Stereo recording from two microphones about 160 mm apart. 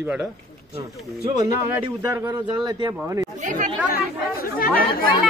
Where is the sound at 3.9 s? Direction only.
70° left (ahead or behind).